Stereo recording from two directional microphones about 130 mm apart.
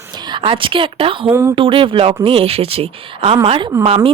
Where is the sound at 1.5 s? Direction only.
40° right (ahead or behind).